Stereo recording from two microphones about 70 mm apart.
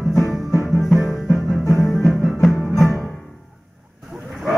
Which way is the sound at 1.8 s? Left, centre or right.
Centre.